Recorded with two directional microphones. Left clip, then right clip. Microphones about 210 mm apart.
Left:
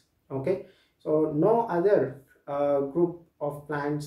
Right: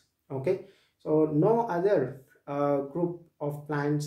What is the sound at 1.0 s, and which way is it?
Speech, 30° right (ahead or behind).